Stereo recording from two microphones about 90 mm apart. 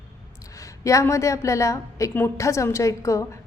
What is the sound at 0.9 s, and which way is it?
A woman's voice, 35° left (ahead or behind).